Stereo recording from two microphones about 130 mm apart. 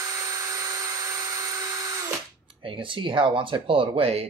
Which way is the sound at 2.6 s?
40° right (ahead or behind).